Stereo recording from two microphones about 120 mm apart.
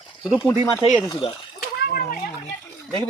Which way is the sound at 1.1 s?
40° left (ahead or behind).